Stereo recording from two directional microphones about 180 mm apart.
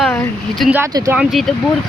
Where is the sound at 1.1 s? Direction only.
Centre (ahead or behind).